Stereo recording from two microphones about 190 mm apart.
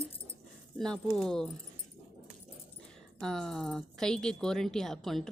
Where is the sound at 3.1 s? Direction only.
5° left (ahead or behind).